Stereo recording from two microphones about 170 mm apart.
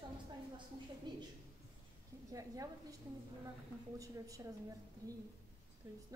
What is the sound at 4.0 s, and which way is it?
Speech, 20° right (ahead or behind).